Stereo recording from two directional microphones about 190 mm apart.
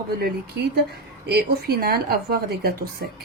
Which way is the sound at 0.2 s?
55° right (ahead or behind).